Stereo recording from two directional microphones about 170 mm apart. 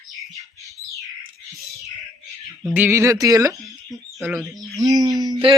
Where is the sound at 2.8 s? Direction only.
15° right (ahead or behind).